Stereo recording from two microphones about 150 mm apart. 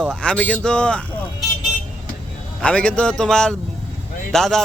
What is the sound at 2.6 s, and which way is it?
A man's voice, 5° left (ahead or behind).